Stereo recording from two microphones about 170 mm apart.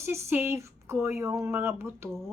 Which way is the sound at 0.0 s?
15° right (ahead or behind).